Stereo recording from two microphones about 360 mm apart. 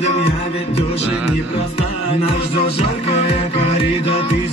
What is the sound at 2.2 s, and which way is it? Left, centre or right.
Music, centre.